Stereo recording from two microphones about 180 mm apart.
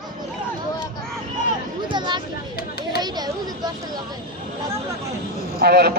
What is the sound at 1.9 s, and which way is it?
Speech, 25° right (ahead or behind).